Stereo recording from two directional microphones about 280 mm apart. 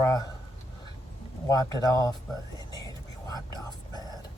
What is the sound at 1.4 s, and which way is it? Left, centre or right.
Speech, centre.